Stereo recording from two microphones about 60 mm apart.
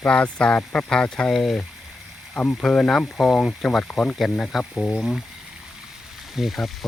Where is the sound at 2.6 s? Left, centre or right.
Centre.